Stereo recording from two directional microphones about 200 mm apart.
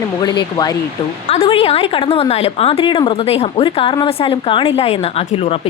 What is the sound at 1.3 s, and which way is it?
A woman's voice, 30° left (ahead or behind).